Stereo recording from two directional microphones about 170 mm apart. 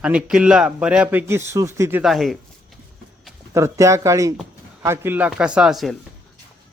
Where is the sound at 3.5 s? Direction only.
15° right (ahead or behind); by 6.0 s centre (ahead or behind).